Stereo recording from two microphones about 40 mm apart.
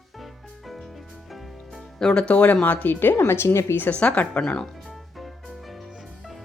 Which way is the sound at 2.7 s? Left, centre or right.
Left.